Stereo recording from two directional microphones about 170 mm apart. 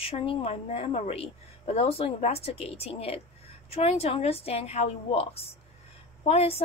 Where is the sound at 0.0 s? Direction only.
35° left (ahead or behind).